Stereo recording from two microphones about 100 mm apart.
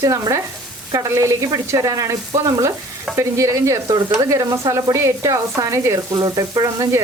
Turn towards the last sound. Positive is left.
turn(degrees=-35)  # may be behind; listen again after turning